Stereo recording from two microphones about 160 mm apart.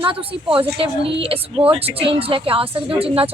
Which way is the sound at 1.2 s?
35° right (ahead or behind).